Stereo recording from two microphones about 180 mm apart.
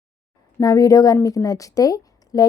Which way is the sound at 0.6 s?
20° left (ahead or behind).